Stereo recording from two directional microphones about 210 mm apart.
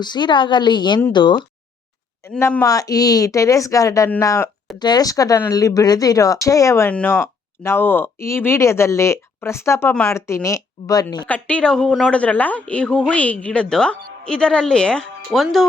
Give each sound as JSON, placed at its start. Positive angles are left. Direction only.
{"t": 0.0, "sound": "a woman's voice", "side_deg": 20}
{"t": 2.2, "sound": "speech", "side_deg": 10}
{"t": 11.3, "sound": "speech", "side_deg": 5}